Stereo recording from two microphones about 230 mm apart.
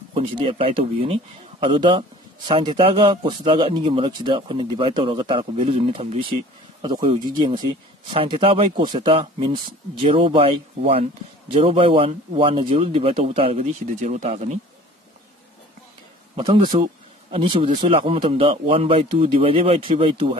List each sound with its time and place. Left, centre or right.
0.1 s a man's voice: right
16.3 s a man's voice: right